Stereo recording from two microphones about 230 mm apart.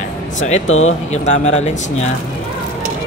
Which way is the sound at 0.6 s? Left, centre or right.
Left.